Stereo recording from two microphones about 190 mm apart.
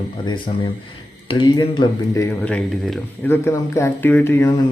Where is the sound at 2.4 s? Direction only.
5° left (ahead or behind).